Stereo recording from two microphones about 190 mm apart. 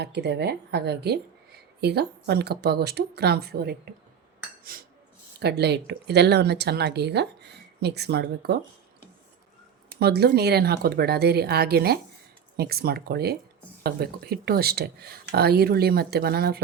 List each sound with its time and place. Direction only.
0.0 s speech: 60° right (ahead or behind)
5.4 s speech: 60° right (ahead or behind)
10.0 s speech: 55° right (ahead or behind)